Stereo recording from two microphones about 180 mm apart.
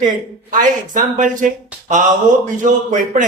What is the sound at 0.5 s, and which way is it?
Speech, 45° right (ahead or behind).